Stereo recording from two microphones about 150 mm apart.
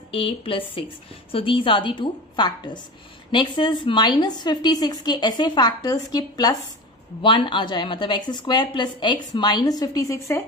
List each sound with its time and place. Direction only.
0.1 s a woman's voice: 35° left (ahead or behind); by 10.4 s 20° left (ahead or behind)